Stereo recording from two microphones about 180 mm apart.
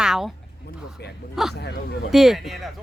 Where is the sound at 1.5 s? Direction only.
65° left (ahead or behind).